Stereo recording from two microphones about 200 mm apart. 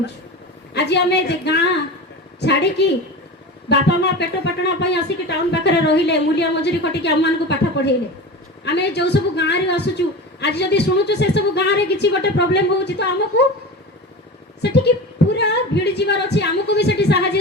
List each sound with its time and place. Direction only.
0.7 s speech: 55° left (ahead or behind)
14.6 s speech: 60° left (ahead or behind)